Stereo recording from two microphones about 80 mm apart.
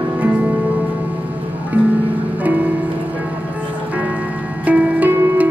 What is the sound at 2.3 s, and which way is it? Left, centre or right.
Music, centre.